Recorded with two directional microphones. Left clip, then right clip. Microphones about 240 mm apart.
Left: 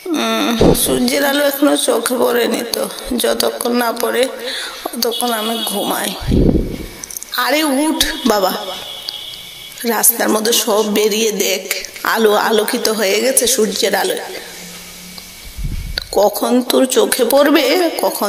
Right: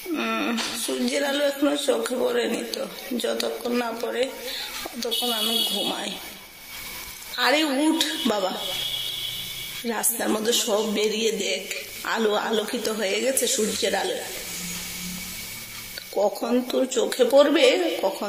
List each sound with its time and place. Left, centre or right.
0.1 s a sound: left
1.0 s speech: left
7.3 s speech: left
9.8 s speech: left
15.9 s speech: left